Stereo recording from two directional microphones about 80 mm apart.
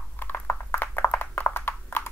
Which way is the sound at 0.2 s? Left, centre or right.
Left.